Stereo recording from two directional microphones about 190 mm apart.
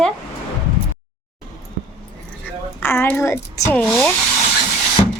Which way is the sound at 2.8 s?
10° left (ahead or behind).